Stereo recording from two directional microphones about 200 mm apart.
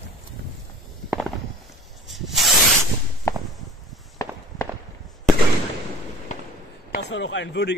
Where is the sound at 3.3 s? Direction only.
15° left (ahead or behind).